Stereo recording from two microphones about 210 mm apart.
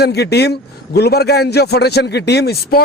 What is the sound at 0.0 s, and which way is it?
Speech, 50° left (ahead or behind).